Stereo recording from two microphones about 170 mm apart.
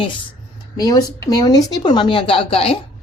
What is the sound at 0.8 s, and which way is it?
Speech, 20° left (ahead or behind).